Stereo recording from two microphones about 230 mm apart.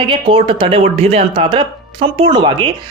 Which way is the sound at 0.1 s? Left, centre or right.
Right.